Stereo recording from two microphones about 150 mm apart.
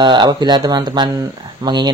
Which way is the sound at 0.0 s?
30° right (ahead or behind).